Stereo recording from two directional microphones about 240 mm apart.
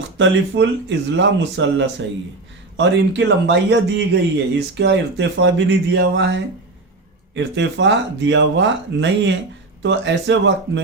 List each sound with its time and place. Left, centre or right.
0.2 s speech: right